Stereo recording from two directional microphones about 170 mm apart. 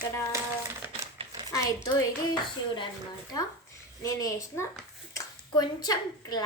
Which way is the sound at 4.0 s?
20° left (ahead or behind).